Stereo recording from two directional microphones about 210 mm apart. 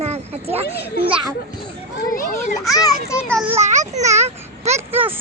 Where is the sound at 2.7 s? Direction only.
15° left (ahead or behind).